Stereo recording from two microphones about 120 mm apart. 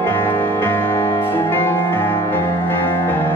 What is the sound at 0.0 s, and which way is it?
Music, 15° left (ahead or behind).